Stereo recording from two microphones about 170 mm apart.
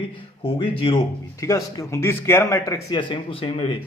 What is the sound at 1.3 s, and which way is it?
Speech, 20° left (ahead or behind).